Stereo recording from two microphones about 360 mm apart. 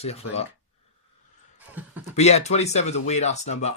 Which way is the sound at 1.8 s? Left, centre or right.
Centre.